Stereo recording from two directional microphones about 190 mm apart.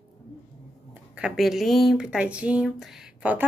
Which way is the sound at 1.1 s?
5° right (ahead or behind).